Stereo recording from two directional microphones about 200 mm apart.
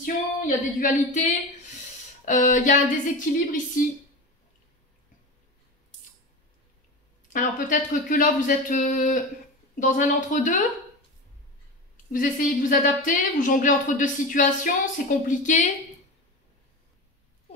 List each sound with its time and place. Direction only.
0.0 s a woman's voice: 40° left (ahead or behind)
7.3 s a woman's voice: 40° left (ahead or behind)
12.1 s a woman's voice: 40° left (ahead or behind)